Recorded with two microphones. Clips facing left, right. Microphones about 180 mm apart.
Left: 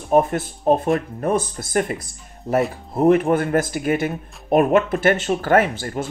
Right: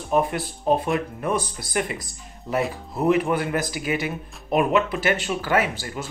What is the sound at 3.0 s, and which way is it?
Speech, 45° left (ahead or behind).